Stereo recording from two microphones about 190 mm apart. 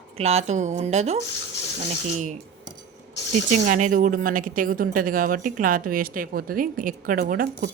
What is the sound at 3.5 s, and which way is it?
A woman's voice, 40° right (ahead or behind).